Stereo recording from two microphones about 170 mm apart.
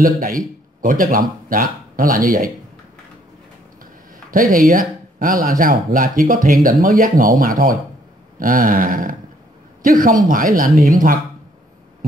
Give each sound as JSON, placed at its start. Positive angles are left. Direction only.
{"t": 0.0, "sound": "speech", "side_deg": -55}
{"t": 4.3, "sound": "speech", "side_deg": -55}